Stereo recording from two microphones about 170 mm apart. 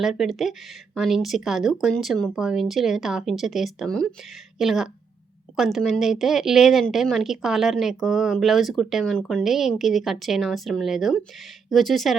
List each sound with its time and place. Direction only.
0.0 s a woman's voice: centre (ahead or behind)